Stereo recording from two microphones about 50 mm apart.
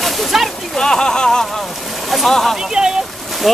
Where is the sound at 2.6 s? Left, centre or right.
Centre.